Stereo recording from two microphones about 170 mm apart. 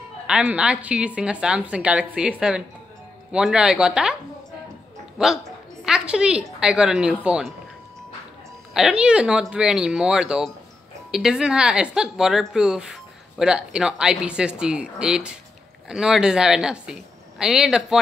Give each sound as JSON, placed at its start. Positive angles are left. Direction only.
{"t": 0.3, "sound": "speech", "side_deg": -5}
{"t": 8.7, "sound": "speech", "side_deg": -5}